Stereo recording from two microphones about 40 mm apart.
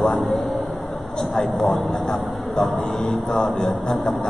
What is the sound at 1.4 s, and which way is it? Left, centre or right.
Mantra, centre.